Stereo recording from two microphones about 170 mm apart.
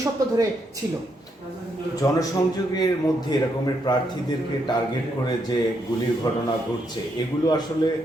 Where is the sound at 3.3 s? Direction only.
25° left (ahead or behind).